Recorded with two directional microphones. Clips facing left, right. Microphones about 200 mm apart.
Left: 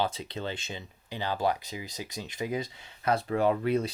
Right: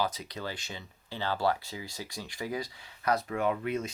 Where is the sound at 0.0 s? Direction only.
25° left (ahead or behind).